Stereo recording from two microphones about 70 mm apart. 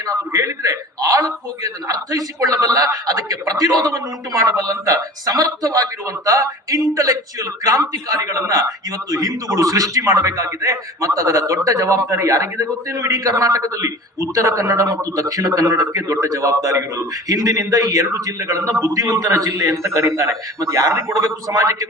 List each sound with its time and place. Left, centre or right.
0.0 s a man's voice: right
19.4 s a man's voice: right